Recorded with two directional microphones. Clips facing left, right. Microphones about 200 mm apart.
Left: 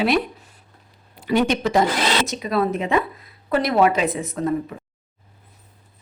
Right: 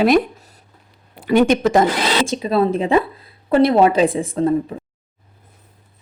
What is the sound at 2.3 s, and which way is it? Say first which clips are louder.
A woman's voice: right 4 dB; 30° right (ahead or behind).